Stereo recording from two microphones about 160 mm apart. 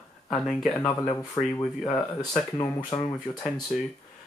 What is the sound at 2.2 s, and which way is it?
Speech, 25° left (ahead or behind).